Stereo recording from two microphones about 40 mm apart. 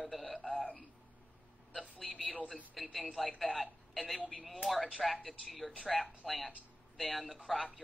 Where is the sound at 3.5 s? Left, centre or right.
Right.